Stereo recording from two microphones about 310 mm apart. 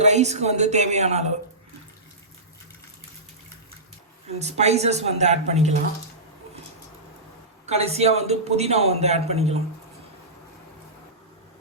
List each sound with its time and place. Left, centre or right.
0.0 s a man's voice: right
4.4 s a man's voice: right
7.7 s a man's voice: centre